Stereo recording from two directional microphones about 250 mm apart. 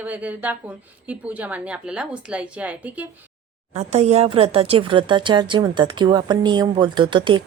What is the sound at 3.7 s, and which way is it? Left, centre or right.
Speech, right.